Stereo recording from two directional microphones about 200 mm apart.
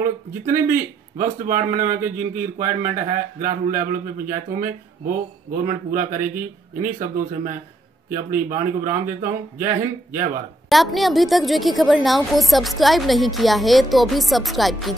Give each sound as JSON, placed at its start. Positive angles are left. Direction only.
{"t": 0.7, "sound": "speech", "side_deg": -40}
{"t": 10.7, "sound": "a woman's voice", "side_deg": 0}